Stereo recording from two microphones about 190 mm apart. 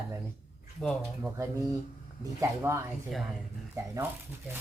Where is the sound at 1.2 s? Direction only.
15° right (ahead or behind).